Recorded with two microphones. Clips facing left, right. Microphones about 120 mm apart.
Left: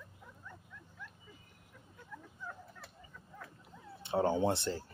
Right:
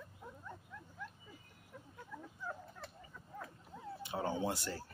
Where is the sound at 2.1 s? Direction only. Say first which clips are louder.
Right 1 dB; 10° right (ahead or behind).